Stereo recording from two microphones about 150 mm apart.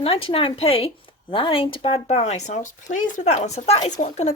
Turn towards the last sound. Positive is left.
turn(degrees=50)  # may be behind; listen again after turning